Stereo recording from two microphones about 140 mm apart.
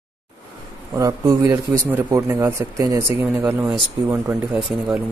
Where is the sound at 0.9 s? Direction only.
25° right (ahead or behind).